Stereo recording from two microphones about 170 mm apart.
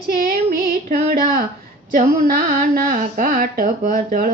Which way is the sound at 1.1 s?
60° right (ahead or behind).